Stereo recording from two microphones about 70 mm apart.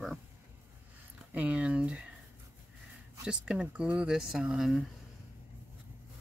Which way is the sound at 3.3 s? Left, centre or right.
Centre.